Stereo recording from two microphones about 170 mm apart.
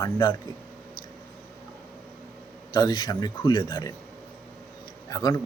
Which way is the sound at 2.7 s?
25° left (ahead or behind).